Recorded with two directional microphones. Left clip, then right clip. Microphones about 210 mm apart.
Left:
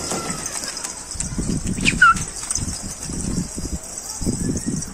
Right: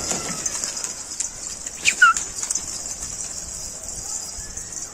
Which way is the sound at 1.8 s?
20° right (ahead or behind).